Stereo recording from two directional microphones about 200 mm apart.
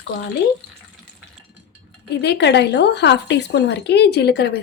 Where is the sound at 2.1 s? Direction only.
60° left (ahead or behind).